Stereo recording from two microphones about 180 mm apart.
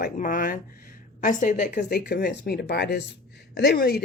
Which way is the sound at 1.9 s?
65° left (ahead or behind).